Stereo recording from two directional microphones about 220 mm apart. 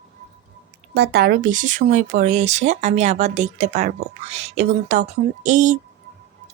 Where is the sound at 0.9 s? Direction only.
45° right (ahead or behind).